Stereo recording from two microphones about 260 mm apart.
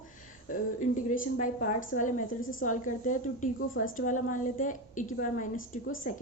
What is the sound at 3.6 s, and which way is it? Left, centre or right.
Speech, left.